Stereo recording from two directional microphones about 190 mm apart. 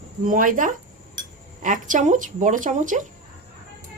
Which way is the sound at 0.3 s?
45° right (ahead or behind).